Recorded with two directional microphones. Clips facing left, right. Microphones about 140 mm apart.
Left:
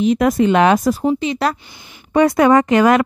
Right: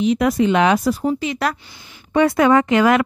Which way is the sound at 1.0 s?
25° left (ahead or behind).